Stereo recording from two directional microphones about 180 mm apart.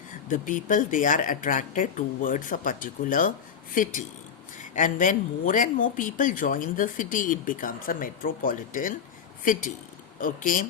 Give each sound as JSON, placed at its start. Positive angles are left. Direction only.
{"t": 0.3, "sound": "speech", "side_deg": 45}